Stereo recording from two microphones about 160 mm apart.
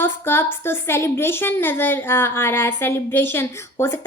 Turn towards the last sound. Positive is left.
turn(degrees=15)  # may be behind; listen again after turning